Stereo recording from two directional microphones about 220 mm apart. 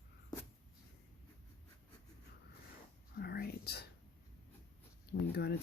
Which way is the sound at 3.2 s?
45° left (ahead or behind).